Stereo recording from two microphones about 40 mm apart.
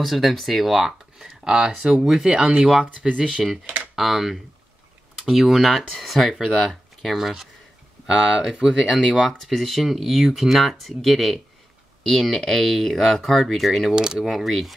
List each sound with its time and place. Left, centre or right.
0.0 s speech: centre
1.1 s speech: centre
3.0 s speech: centre
3.6 s computer keyboard: right
3.9 s speech: centre
9.4 s speech: centre
13.9 s speech: centre
14.3 s speech: centre